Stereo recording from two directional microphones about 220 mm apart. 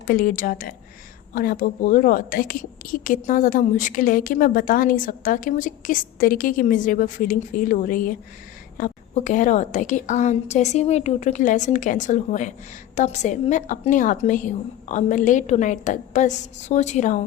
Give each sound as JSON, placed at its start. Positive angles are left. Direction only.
{"t": 0.1, "sound": "a woman's voice", "side_deg": 40}